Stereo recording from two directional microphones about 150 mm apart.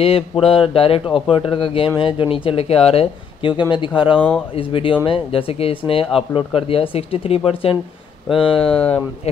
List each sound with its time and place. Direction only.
0.0 s speech: 40° left (ahead or behind)